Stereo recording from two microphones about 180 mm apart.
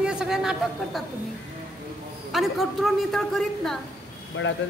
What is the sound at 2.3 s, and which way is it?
A woman's voice, centre (ahead or behind).